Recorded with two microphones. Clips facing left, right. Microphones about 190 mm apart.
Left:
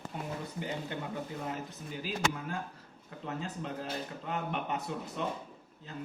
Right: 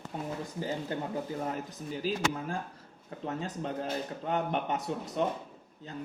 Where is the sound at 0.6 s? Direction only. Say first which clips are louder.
Right 5 dB; 35° right (ahead or behind).